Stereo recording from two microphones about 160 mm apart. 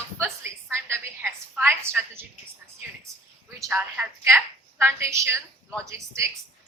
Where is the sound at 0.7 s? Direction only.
15° right (ahead or behind).